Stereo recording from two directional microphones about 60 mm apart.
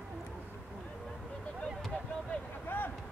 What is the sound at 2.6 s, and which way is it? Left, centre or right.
Vehicle, left.